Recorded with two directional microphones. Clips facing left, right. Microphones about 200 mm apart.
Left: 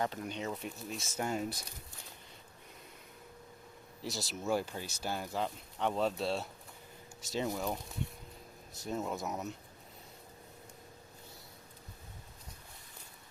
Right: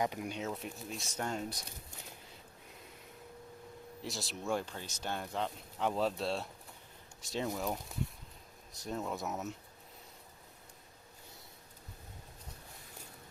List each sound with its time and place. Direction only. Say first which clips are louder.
0.0 s speech: right 1 dB; 10° right (ahead or behind); by 1.6 s 5° left (ahead or behind)
4.0 s speech: left 2 dB; centre (ahead or behind)
8.8 s speech: left 1 dB; centre (ahead or behind)